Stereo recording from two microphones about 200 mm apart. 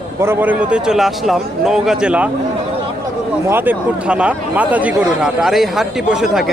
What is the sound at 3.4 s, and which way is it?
A man's voice, 10° right (ahead or behind).